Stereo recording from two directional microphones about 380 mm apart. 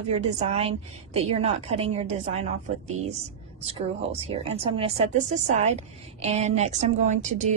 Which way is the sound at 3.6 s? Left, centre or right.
Centre.